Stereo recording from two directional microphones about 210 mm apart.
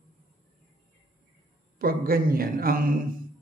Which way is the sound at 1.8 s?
45° right (ahead or behind).